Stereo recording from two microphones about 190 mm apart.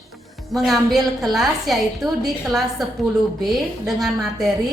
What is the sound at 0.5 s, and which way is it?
A woman's voice, centre (ahead or behind).